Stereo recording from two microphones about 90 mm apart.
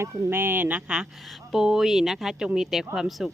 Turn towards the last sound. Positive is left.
turn(degrees=-5)  # may be behind; listen again after turning